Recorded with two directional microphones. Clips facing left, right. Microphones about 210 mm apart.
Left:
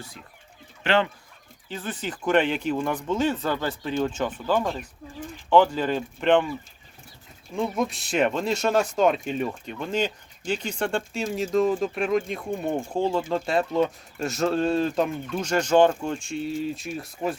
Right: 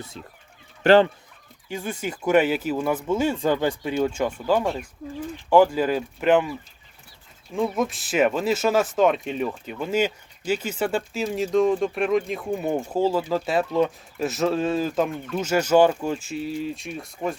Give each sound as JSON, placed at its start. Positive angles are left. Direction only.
{"t": 0.9, "sound": "speech", "side_deg": -35}
{"t": 1.6, "sound": "speech", "side_deg": -10}
{"t": 7.5, "sound": "speech", "side_deg": 0}